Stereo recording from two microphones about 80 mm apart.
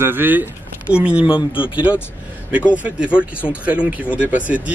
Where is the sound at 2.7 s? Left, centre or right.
Centre.